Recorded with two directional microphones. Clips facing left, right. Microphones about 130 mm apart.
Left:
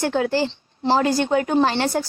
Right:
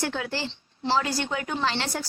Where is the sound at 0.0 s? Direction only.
45° left (ahead or behind).